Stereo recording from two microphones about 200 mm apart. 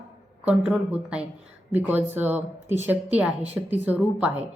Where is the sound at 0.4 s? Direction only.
5° right (ahead or behind).